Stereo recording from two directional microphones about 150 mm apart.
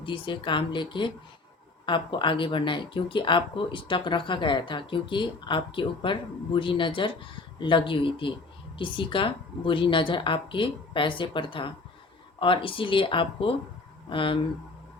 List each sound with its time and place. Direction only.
0.0 s speech: 35° left (ahead or behind)